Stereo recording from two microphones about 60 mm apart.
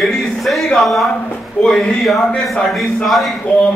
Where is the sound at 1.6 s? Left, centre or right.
Centre.